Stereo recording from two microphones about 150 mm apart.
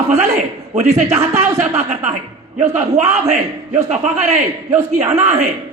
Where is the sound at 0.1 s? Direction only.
45° right (ahead or behind).